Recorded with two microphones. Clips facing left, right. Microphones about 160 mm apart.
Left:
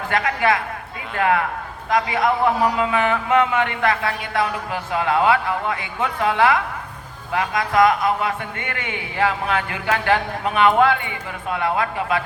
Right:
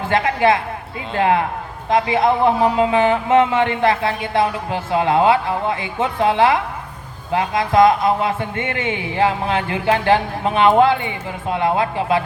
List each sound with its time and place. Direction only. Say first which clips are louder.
0.1 s speech: right 4 dB; 25° right (ahead or behind)